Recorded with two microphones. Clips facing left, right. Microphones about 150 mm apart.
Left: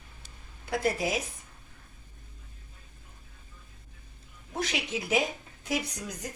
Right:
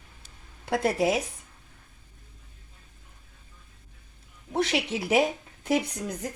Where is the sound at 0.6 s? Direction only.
65° right (ahead or behind).